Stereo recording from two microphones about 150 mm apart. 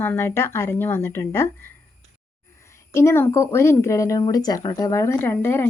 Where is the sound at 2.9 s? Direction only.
15° left (ahead or behind).